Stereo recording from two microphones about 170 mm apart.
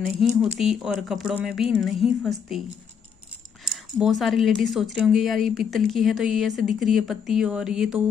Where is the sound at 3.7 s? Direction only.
Centre (ahead or behind).